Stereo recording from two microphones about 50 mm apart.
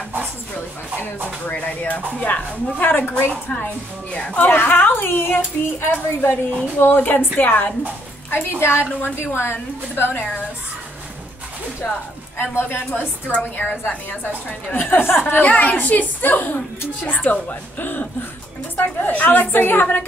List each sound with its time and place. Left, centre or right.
1.4 s speech: left
2.9 s a woman's voice: left
4.1 s speech: centre
4.4 s a woman's voice: left
8.3 s a woman's voice: left
12.4 s a woman's voice: left
13.4 s a woman's voice: left
15.4 s a woman's voice: left